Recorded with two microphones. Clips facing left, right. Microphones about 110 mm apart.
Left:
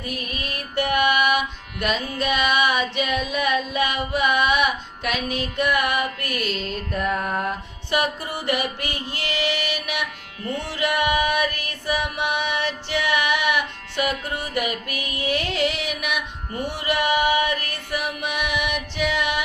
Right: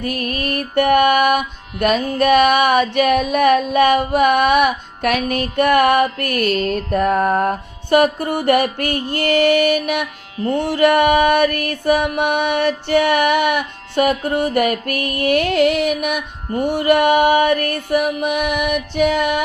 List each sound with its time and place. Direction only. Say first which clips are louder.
0.0 s mantra: right 9 dB; 65° right (ahead or behind)
6.6 s music: right 9 dB; 55° right (ahead or behind)